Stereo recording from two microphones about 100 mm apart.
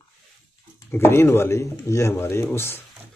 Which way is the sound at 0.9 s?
25° left (ahead or behind).